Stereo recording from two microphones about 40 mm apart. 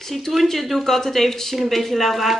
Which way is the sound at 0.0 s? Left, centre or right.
Centre.